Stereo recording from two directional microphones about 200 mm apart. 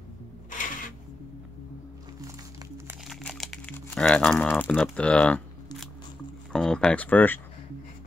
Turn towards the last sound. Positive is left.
turn(degrees=10)  # may be behind; listen again after turning